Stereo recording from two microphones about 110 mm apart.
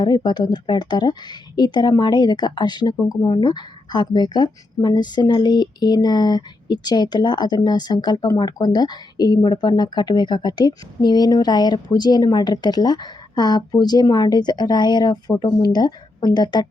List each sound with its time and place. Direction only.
0.0 s speech: 40° left (ahead or behind)
3.0 s speech: 25° left (ahead or behind)
3.2 s speech: 45° left (ahead or behind)